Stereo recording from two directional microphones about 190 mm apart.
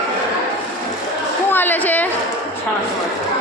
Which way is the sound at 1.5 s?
10° left (ahead or behind).